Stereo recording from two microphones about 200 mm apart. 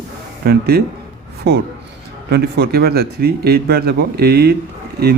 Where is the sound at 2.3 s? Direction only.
55° right (ahead or behind).